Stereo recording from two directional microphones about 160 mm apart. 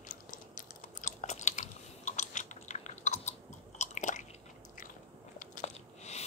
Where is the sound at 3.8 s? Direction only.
50° left (ahead or behind).